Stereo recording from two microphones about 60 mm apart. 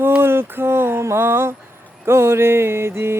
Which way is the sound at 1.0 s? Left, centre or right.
Right.